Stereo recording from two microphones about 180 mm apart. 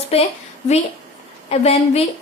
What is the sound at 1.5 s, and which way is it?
Speech, 35° left (ahead or behind).